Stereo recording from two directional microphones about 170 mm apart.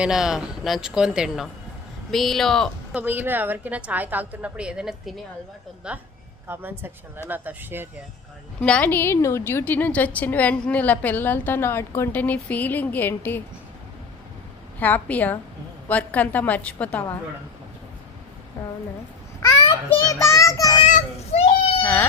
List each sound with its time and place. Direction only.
0.0 s speech: 5° right (ahead or behind)
2.9 s a woman's voice: 10° right (ahead or behind)
8.6 s a woman's voice: 5° left (ahead or behind)
14.8 s a woman's voice: 10° left (ahead or behind)
19.4 s a child's voice: 20° left (ahead or behind)
20.8 s children playing: 45° left (ahead or behind)